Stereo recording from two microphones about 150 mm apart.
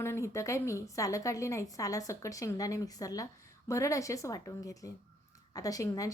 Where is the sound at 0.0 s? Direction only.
20° left (ahead or behind).